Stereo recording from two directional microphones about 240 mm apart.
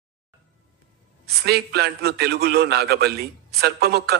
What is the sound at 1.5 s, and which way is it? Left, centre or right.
A man's voice, right.